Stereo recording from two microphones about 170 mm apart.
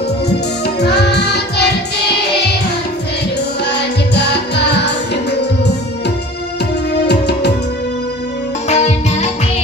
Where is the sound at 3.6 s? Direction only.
80° left.